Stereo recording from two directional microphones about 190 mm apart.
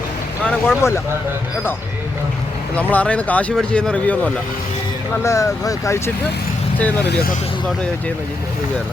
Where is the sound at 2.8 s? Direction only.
10° left (ahead or behind).